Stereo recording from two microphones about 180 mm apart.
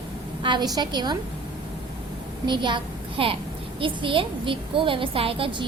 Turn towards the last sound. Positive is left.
turn(degrees=-30)  # may be behind; listen again after turning